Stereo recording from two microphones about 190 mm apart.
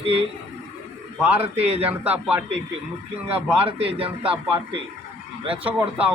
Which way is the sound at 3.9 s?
30° right (ahead or behind).